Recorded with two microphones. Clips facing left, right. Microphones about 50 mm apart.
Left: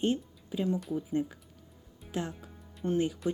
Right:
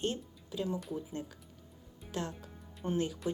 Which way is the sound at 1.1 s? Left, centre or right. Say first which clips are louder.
Left 10 dB; centre.